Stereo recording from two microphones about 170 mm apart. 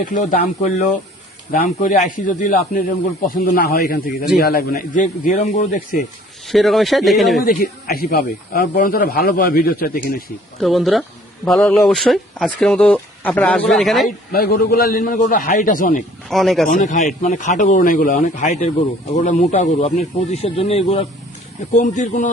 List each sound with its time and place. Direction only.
0.0 s speech: 50° left (ahead or behind)
6.5 s speech: centre (ahead or behind)
7.4 s speech: 60° left (ahead or behind)
10.6 s speech: centre (ahead or behind)
14.3 s speech: 65° left (ahead or behind)
16.3 s speech: centre (ahead or behind)
16.6 s speech: 50° left (ahead or behind)